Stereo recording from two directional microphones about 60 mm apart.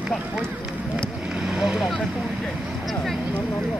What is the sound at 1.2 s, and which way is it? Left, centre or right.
Speech, centre.